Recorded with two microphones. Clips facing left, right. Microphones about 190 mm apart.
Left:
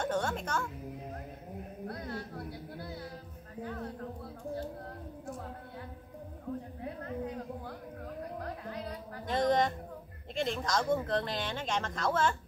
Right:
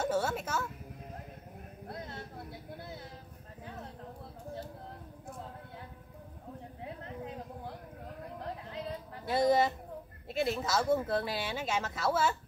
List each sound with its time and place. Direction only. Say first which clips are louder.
0.0 s music: right 1 dB; 5° right (ahead or behind)
1.9 s a sound: left 3 dB; 25° right (ahead or behind)
9.2 s music: right 1 dB; 10° right (ahead or behind)
10.3 s speech: right 1 dB; 5° right (ahead or behind)